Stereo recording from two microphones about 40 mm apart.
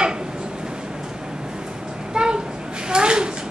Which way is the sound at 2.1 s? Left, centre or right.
Right.